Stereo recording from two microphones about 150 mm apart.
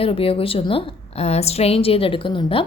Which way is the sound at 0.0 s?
40° left (ahead or behind).